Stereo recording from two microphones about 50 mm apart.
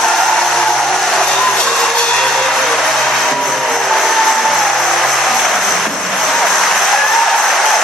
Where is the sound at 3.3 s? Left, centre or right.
Centre.